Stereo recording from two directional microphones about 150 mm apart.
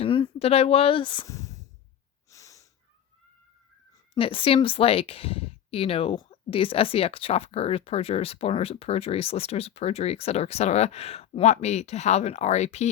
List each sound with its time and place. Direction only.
0.0 s speech: 35° left (ahead or behind)
1.3 s sigh: 20° left (ahead or behind)
2.3 s wheeze: 20° left (ahead or behind)
4.1 s a woman's voice: 35° left (ahead or behind)